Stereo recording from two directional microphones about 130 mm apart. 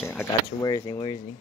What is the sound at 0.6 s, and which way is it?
Speech, 35° left (ahead or behind).